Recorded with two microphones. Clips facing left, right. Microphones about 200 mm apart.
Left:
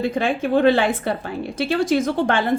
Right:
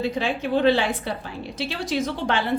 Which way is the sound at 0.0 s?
50° left (ahead or behind).